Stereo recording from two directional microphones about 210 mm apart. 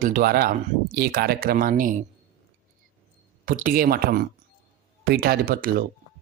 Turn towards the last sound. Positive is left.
turn(degrees=-45)  # may be behind; listen again after turning